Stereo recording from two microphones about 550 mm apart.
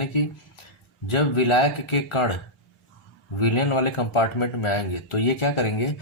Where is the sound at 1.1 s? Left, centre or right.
Left.